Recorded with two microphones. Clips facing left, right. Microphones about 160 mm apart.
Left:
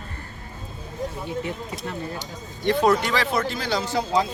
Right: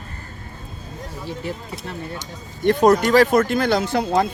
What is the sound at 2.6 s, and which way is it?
Speech, 45° right (ahead or behind).